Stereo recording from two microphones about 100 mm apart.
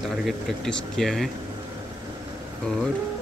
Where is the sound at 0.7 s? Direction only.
5° left (ahead or behind).